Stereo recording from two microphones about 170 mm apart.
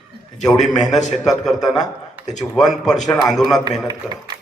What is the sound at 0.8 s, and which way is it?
Speech, 45° left (ahead or behind).